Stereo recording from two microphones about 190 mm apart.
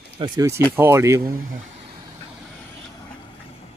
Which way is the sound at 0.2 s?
20° right (ahead or behind).